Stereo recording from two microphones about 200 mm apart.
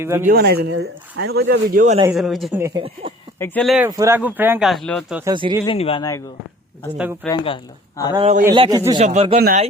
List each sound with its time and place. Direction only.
0.0 s speech: 10° right (ahead or behind)
0.3 s speech: 50° right (ahead or behind)
2.1 s speech: centre (ahead or behind)
2.6 s speech: 15° right (ahead or behind)
3.3 s speech: 10° left (ahead or behind)
3.8 s speech: 15° right (ahead or behind)
4.7 s speech: centre (ahead or behind)
5.2 s speech: 20° right (ahead or behind)
5.6 s speech: 30° left (ahead or behind)
6.9 s speech: 5° right (ahead or behind)
7.3 s speech: 25° left (ahead or behind)
8.1 s speech: 30° right (ahead or behind)